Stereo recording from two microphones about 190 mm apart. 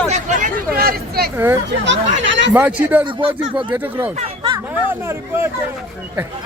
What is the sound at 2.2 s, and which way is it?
Speech, 75° right (ahead or behind).